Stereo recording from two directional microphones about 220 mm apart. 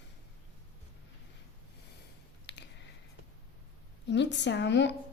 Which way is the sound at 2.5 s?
50° left (ahead or behind).